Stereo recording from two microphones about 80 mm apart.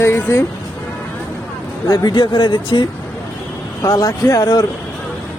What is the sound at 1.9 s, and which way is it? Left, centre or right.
Speech, left.